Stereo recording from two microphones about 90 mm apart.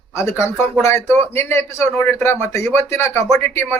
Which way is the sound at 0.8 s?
30° left (ahead or behind).